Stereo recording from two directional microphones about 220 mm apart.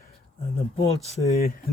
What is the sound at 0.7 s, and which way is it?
Speech, 25° left (ahead or behind).